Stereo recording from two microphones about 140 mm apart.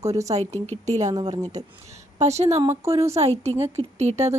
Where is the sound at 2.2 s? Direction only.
50° right (ahead or behind).